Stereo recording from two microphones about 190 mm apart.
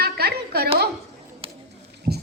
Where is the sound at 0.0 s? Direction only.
55° right (ahead or behind).